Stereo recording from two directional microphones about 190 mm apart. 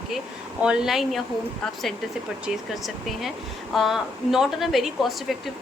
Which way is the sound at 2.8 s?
Centre (ahead or behind).